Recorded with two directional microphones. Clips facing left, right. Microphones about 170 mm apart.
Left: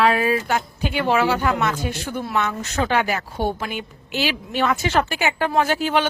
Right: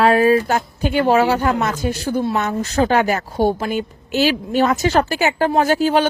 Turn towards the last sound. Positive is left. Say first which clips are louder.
# right 4 dB
turn(degrees=-40)  # may be behind; listen again after turning